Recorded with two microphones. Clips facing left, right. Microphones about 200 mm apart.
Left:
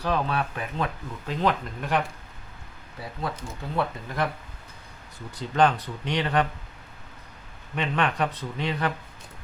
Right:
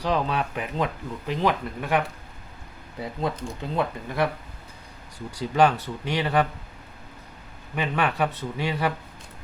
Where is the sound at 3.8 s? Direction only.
10° right (ahead or behind).